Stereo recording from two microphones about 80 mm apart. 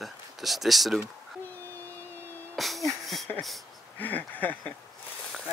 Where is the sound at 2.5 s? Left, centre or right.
Centre.